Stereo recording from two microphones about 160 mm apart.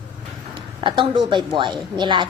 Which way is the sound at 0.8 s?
30° right (ahead or behind).